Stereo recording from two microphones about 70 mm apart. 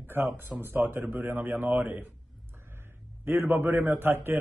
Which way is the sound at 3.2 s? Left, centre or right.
Right.